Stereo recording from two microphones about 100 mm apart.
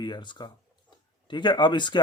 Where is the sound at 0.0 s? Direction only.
50° left (ahead or behind).